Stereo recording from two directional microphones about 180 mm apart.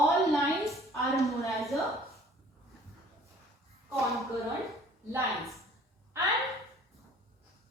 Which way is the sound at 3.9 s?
15° right (ahead or behind).